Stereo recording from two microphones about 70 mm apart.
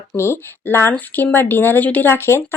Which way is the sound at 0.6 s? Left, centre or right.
Left.